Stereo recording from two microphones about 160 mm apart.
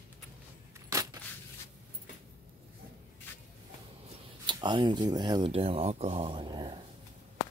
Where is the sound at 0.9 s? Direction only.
20° right (ahead or behind).